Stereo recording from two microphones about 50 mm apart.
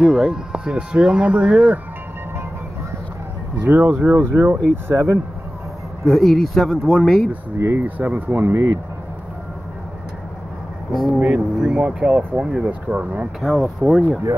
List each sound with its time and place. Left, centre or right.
0.0 s speech: centre
3.5 s speech: right
3.8 s speech: right
4.1 s speech: right
6.0 s speech: centre
7.5 s speech: right
7.8 s speech: right
8.3 s speech: right
11.1 s speech: right
11.5 s speech: centre
12.6 s speech: right
13.4 s speech: centre